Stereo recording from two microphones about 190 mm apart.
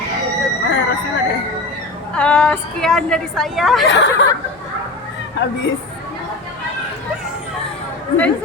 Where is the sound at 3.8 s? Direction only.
65° left (ahead or behind).